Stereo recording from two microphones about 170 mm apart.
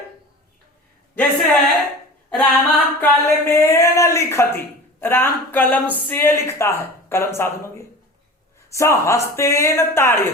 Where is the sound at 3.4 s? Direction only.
15° left (ahead or behind).